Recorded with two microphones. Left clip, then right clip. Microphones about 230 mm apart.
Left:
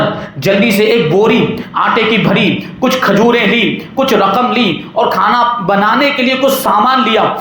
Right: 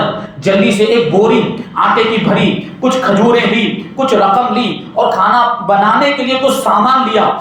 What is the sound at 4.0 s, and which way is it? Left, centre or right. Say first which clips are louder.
A man's voice: even; left.